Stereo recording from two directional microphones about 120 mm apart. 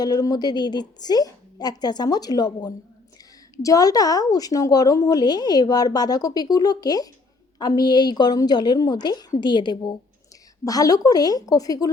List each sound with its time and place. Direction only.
0.0 s a woman's voice: 35° left (ahead or behind)